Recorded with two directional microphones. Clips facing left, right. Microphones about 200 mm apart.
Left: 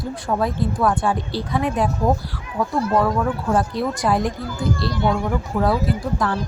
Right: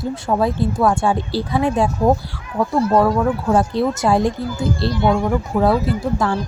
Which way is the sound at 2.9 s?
25° right (ahead or behind).